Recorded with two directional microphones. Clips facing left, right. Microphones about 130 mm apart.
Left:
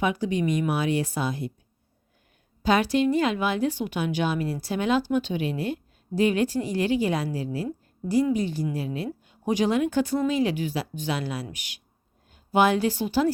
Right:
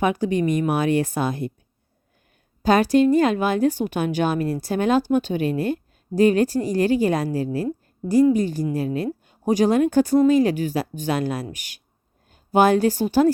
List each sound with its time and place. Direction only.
0.0 s a woman's voice: 50° right (ahead or behind)
2.6 s a woman's voice: 45° right (ahead or behind)